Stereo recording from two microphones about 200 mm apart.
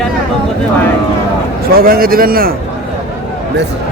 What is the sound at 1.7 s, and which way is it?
Speech, 45° right (ahead or behind).